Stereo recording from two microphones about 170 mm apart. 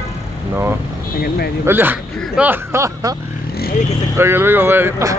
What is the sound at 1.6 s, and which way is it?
Speech, 10° right (ahead or behind).